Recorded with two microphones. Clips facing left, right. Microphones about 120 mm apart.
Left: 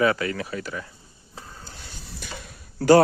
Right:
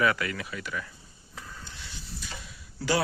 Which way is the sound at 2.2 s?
60° left (ahead or behind).